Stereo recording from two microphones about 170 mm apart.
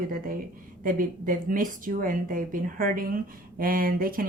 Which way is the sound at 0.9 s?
55° right (ahead or behind).